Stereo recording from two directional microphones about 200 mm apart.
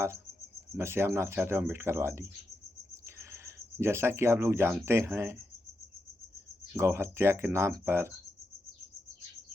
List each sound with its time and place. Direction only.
0.8 s speech: 10° right (ahead or behind)
2.9 s a sound: 15° right (ahead or behind)
4.9 s speech: 10° right (ahead or behind)
6.7 s speech: 10° right (ahead or behind)